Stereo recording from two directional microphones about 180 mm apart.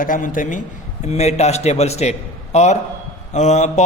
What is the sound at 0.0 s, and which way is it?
Speech, 50° left (ahead or behind).